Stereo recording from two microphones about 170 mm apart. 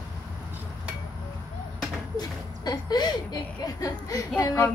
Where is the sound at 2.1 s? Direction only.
25° left (ahead or behind).